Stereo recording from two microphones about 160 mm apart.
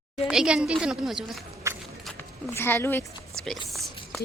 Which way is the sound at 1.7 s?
20° right (ahead or behind).